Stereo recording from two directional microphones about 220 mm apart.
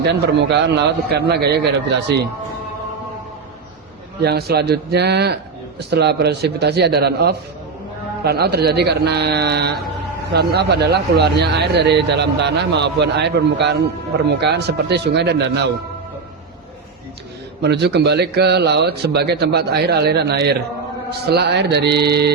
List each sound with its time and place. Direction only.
0.1 s speech: 50° right (ahead or behind)
4.2 s speech: 45° right (ahead or behind)
17.6 s speech: 50° right (ahead or behind)